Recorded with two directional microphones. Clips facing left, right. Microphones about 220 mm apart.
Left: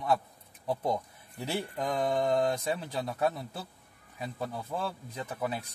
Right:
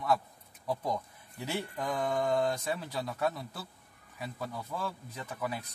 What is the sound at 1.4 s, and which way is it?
Speech, 30° left (ahead or behind).